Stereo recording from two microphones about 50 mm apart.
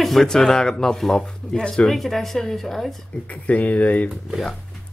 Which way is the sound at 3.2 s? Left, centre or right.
Left.